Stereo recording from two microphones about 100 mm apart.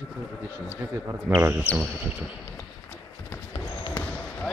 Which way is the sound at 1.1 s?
25° right (ahead or behind).